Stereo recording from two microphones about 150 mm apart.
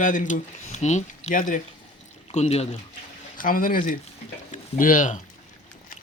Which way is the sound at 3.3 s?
65° left (ahead or behind).